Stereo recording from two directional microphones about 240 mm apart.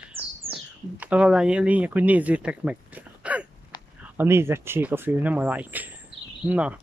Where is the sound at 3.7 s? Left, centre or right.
Centre.